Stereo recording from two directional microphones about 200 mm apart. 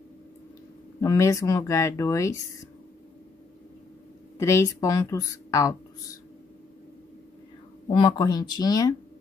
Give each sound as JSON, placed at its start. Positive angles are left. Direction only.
{"t": 1.0, "sound": "speech", "side_deg": 15}
{"t": 4.4, "sound": "speech", "side_deg": 15}
{"t": 7.9, "sound": "speech", "side_deg": 20}